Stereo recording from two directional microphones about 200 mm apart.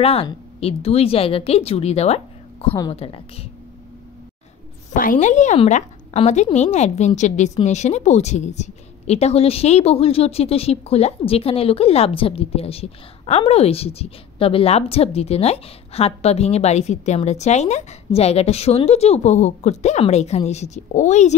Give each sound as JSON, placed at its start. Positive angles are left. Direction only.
{"t": 0.0, "sound": "speech", "side_deg": 30}
{"t": 2.7, "sound": "a woman's voice", "side_deg": 20}
{"t": 3.0, "sound": "a woman's voice", "side_deg": 30}
{"t": 4.9, "sound": "a woman's voice", "side_deg": 40}